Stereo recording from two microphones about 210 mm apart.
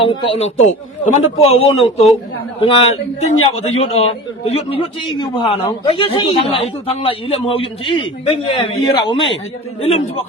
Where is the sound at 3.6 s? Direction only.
30° left (ahead or behind).